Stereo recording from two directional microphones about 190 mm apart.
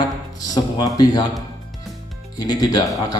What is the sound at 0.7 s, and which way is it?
Speech, 20° left (ahead or behind).